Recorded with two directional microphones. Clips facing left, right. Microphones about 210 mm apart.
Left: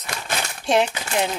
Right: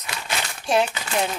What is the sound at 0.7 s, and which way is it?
Speech, 20° left (ahead or behind).